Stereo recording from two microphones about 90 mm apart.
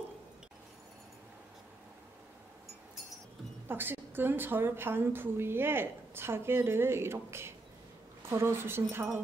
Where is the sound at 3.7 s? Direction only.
25° right (ahead or behind).